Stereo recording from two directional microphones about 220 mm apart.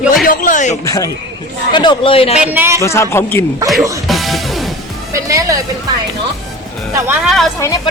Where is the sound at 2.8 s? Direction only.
10° left (ahead or behind).